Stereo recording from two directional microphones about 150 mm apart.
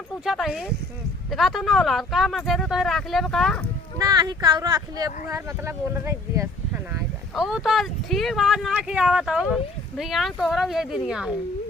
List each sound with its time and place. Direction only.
0.3 s speech: centre (ahead or behind)
3.9 s speech: 25° right (ahead or behind)
7.3 s speech: centre (ahead or behind)